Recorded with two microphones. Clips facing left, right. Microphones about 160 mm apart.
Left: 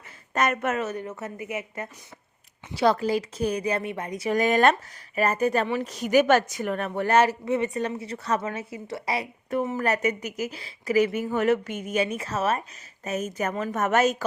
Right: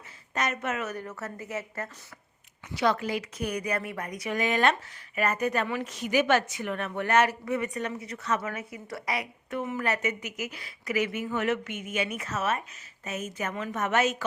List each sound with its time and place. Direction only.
0.3 s a woman's voice: 50° left (ahead or behind)
0.8 s speech: 25° left (ahead or behind)
2.7 s speech: 35° left (ahead or behind)
4.4 s a woman's voice: 45° left (ahead or behind)